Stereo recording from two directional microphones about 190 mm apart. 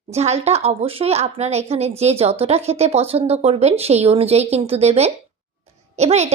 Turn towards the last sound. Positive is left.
turn(degrees=-35)  # may be behind; listen again after turning